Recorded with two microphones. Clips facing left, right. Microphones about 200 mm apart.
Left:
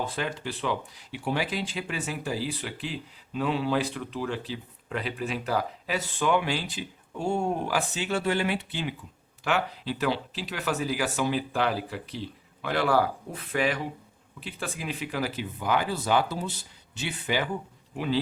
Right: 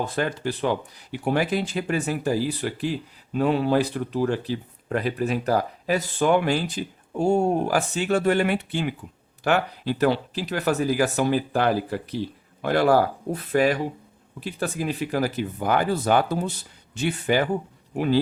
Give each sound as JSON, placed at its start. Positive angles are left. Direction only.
{"t": 0.2, "sound": "speech", "side_deg": -45}